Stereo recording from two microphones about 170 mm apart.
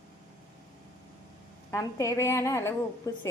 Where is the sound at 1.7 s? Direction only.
20° left (ahead or behind).